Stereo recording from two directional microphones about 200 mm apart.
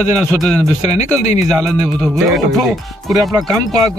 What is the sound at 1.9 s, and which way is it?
Speech, 5° right (ahead or behind).